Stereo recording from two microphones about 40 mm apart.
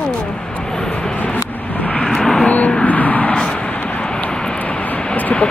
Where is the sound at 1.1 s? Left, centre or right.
Left.